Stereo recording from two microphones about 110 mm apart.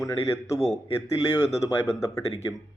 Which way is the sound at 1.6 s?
30° left (ahead or behind).